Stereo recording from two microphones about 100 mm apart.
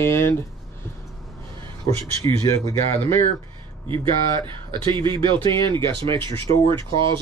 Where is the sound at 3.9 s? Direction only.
55° right (ahead or behind).